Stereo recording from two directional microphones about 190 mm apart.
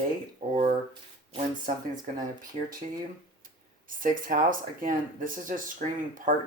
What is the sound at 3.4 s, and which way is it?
Speech, 45° right (ahead or behind).